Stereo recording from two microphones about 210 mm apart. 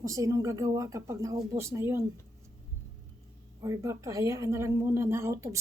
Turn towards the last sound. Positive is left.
turn(degrees=-15)  # may be behind; listen again after turning